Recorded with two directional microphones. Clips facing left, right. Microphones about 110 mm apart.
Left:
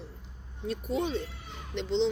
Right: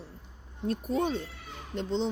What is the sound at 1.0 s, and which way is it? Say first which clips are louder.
Speech: right 1 dB; 45° right (ahead or behind).